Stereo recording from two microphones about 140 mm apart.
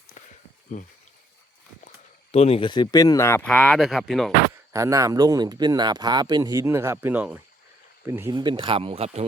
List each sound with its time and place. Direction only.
0.2 s a sound: 60° left (ahead or behind)
0.7 s speech: 65° left (ahead or behind)
2.3 s speech: 45° left (ahead or behind); by 3.4 s 20° left (ahead or behind)
3.4 s speech: centre (ahead or behind)
4.7 s speech: 25° right (ahead or behind)
8.3 s speech: 30° right (ahead or behind); by 9.2 s 50° right (ahead or behind)